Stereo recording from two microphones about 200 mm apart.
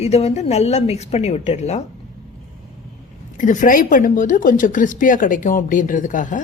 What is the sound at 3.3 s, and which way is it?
A woman's voice, 40° left (ahead or behind).